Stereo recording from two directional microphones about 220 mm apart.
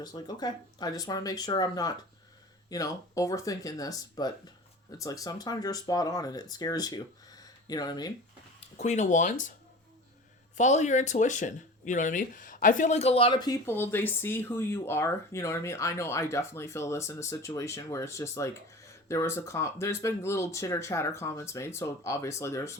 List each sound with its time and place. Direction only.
0.0 s speech: 20° left (ahead or behind)
8.8 s speech: 30° left (ahead or behind)
10.6 s speech: 30° left (ahead or behind); by 22.7 s 15° left (ahead or behind)